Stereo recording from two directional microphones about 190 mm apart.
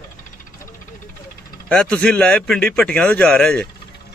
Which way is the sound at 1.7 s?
5° left (ahead or behind).